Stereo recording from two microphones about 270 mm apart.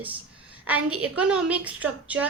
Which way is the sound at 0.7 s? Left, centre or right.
Right.